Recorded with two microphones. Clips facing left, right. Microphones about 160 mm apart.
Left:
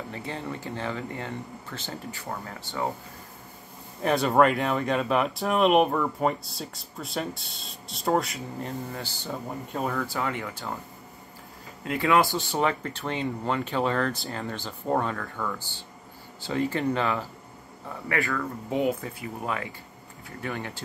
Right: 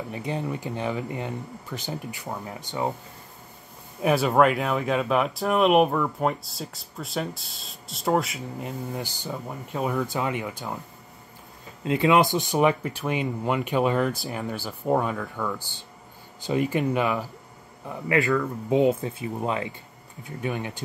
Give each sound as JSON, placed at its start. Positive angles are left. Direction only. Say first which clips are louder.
{"t": 0.1, "sound": "speech", "louder": "right 7 dB", "side_deg": -15}
{"t": 4.0, "sound": "speech", "louder": "right 1 dB", "side_deg": -5}
{"t": 9.7, "sound": "speech", "louder": "right 3 dB", "side_deg": 0}
{"t": 9.9, "sound": "speech", "louder": "right 3 dB", "side_deg": -20}
{"t": 11.8, "sound": "speech", "louder": "right 3 dB", "side_deg": -20}